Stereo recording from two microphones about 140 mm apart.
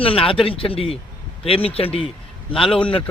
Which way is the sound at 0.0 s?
40° left (ahead or behind).